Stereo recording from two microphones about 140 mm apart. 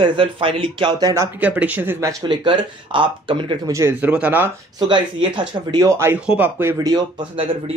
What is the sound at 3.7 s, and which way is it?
Speech, 20° right (ahead or behind).